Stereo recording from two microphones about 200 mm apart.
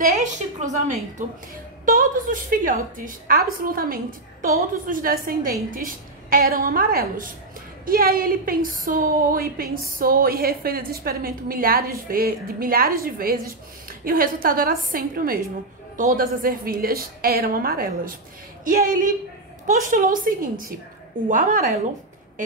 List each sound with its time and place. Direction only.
0.2 s a woman's voice: 35° right (ahead or behind)